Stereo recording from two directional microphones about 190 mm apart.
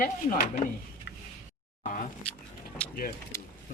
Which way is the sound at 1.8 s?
45° left (ahead or behind).